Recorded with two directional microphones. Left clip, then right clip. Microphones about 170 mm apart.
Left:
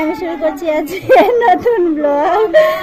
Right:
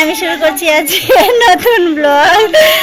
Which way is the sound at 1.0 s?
20° right (ahead or behind).